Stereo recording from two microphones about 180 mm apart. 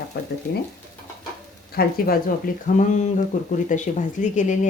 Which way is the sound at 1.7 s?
55° left (ahead or behind).